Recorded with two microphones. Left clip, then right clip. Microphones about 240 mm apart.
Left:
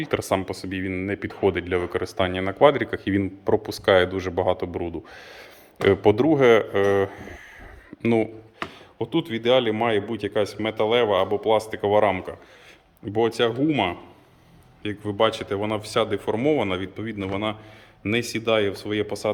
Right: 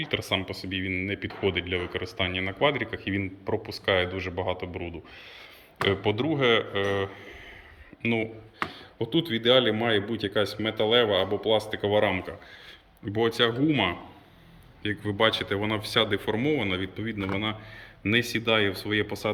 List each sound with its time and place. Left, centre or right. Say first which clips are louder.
0.0 s speech: left 4 dB; left
5.8 s speech: left 7 dB; left
9.0 s speech: left 1 dB; centre